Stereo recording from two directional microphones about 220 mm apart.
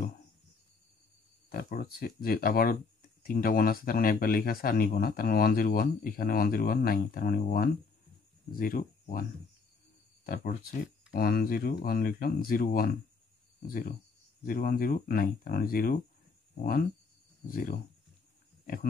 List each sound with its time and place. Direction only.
1.5 s speech: 45° left (ahead or behind)
10.2 s speech: 40° left (ahead or behind)
17.5 s speech: 40° left (ahead or behind)